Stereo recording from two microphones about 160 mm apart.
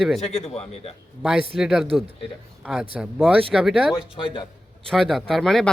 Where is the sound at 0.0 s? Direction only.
Centre (ahead or behind).